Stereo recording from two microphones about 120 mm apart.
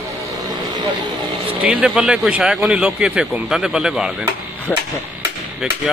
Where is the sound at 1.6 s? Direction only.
5° right (ahead or behind).